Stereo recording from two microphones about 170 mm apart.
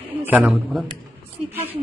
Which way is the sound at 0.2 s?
10° right (ahead or behind).